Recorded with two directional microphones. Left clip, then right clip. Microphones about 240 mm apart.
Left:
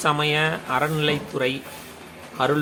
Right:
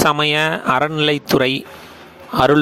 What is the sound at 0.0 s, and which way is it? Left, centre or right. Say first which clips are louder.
Speech: right 6 dB; right.